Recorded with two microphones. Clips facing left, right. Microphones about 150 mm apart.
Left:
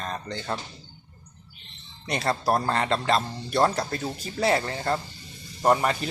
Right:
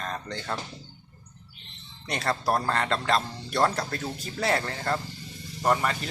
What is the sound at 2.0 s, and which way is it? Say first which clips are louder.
Speech: left 2 dB; 10° left (ahead or behind).